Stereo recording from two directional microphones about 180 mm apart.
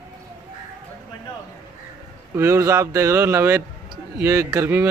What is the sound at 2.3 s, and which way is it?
Speech, 15° right (ahead or behind).